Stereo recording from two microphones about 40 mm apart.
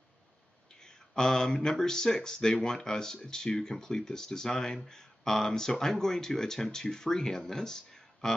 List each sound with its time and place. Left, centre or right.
0.7 s speech: centre